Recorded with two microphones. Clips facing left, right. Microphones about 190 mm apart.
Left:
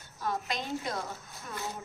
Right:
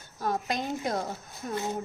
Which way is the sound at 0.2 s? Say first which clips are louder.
Right 4 dB; 45° right (ahead or behind).